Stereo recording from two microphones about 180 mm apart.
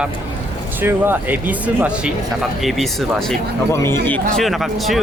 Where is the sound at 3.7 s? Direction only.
15° left (ahead or behind).